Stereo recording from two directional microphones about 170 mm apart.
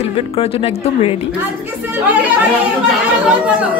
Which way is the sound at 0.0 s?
35° left (ahead or behind).